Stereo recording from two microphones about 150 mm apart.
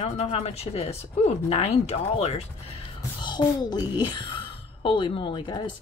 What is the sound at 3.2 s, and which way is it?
A woman's voice, 30° left (ahead or behind).